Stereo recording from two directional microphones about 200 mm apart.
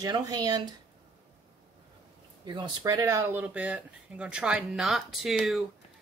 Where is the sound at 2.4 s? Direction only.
25° right (ahead or behind); by 5.6 s centre (ahead or behind).